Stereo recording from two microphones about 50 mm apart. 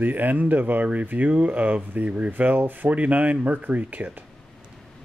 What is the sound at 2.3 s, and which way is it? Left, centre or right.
Speech, right.